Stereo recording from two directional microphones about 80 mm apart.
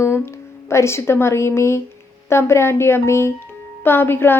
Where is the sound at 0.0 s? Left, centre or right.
Left.